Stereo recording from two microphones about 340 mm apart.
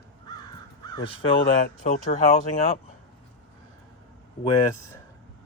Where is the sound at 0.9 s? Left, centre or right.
Centre.